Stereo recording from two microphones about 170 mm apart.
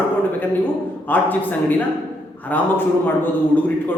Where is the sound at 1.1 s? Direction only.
10° left (ahead or behind).